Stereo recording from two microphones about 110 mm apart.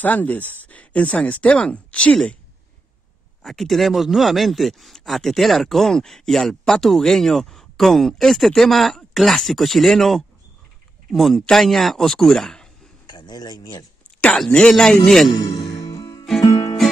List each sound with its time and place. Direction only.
0.0 s speech: 15° left (ahead or behind)
3.4 s speech: centre (ahead or behind)
13.0 s a sound: 40° left (ahead or behind)
14.2 s speech: 5° left (ahead or behind)
15.9 s music: 40° left (ahead or behind)